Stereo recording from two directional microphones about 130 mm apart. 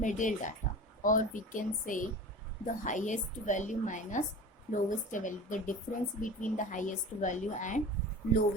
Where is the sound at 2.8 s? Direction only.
75° left (ahead or behind).